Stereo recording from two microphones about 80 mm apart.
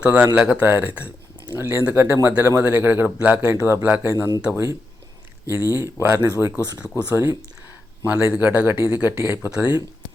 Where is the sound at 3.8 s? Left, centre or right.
Right.